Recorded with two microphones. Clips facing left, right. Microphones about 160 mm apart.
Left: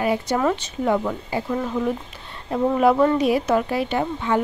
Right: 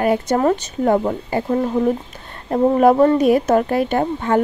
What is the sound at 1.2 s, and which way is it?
Speech, 50° right (ahead or behind).